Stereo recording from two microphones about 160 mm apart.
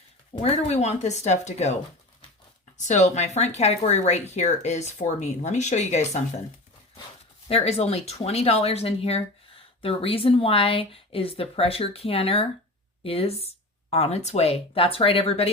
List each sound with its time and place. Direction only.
0.3 s speech: 40° left (ahead or behind)
2.7 s speech: 50° left (ahead or behind)
7.4 s speech: 40° left (ahead or behind)